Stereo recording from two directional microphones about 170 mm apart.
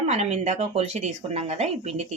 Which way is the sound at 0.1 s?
40° right (ahead or behind).